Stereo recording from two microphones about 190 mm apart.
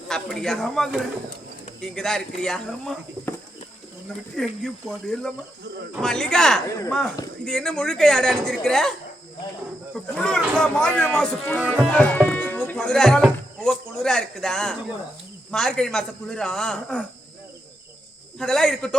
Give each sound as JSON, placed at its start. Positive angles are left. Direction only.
{"t": 0.1, "sound": "speech", "side_deg": 0}
{"t": 4.4, "sound": "speech", "side_deg": 5}
{"t": 18.3, "sound": "speech", "side_deg": 5}